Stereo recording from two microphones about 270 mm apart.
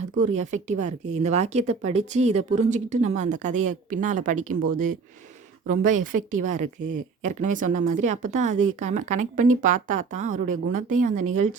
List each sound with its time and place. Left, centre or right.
0.0 s speech: right
6.6 s speech: right
7.3 s speech: right